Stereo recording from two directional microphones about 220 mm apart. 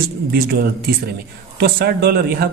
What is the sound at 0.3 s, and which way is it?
A man's voice, 45° right (ahead or behind).